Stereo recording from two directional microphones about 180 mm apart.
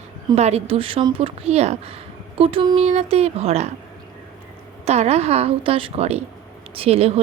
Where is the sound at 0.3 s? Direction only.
35° right (ahead or behind).